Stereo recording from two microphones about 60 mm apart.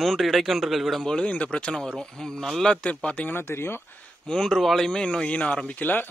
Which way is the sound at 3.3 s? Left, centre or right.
Left.